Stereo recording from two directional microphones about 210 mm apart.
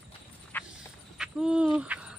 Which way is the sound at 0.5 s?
10° left (ahead or behind).